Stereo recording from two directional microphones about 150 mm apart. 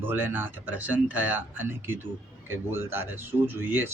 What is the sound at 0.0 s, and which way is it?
A man's voice, 15° right (ahead or behind).